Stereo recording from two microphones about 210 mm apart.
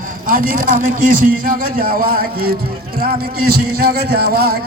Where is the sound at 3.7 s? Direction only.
45° right (ahead or behind).